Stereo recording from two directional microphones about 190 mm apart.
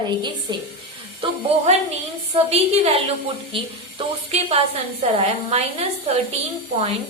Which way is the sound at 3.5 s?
30° right (ahead or behind).